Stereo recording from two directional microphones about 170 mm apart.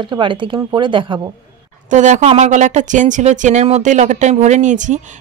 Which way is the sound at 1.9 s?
45° right (ahead or behind).